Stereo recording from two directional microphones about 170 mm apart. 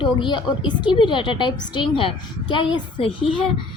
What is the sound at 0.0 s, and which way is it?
A child's voice, 30° left (ahead or behind).